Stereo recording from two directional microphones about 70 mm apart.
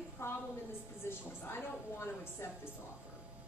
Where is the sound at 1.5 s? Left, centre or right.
Left.